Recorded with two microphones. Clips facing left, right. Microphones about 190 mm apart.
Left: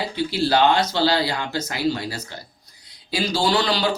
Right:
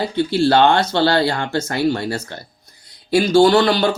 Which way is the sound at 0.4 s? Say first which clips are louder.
Right 3 dB; 60° right (ahead or behind).